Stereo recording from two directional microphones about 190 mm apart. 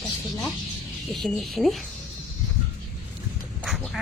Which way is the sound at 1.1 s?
Centre (ahead or behind).